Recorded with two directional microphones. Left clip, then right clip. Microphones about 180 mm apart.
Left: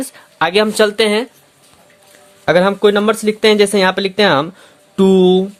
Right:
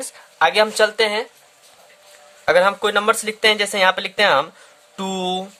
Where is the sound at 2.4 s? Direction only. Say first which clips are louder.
Left 4 dB; 10° left (ahead or behind).